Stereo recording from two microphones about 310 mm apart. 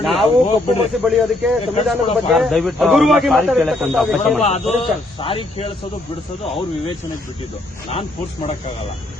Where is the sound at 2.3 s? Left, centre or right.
Centre.